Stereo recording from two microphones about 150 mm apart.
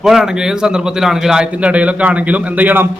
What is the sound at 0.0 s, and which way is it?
A man's voice, 5° right (ahead or behind).